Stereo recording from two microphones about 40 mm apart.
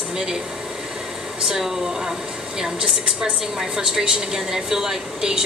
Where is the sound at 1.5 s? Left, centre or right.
Centre.